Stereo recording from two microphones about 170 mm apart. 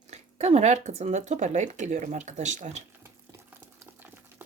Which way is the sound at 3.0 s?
15° right (ahead or behind).